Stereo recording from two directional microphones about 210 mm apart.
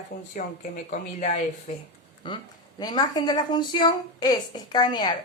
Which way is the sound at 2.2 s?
20° left (ahead or behind).